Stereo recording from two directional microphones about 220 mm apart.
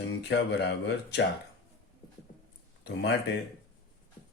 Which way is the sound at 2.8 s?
50° left (ahead or behind).